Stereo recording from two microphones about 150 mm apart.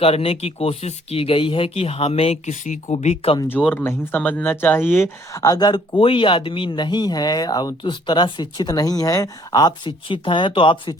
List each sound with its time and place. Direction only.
0.0 s speech: 40° left (ahead or behind)
3.5 s speech: 10° left (ahead or behind); by 10.9 s 35° left (ahead or behind)